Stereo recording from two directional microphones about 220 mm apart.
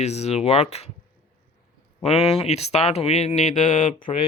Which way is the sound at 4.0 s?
25° left (ahead or behind).